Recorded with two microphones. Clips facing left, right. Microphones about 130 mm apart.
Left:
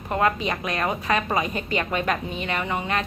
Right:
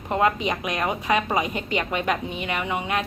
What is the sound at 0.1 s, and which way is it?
A woman's voice, 20° right (ahead or behind).